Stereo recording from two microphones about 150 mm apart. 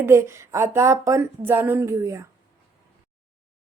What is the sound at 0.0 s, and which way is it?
Speech, 20° right (ahead or behind).